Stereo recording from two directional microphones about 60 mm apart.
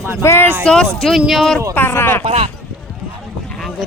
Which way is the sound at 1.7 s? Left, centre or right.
Left.